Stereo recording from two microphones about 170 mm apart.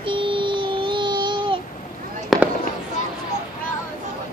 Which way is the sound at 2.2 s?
Centre (ahead or behind).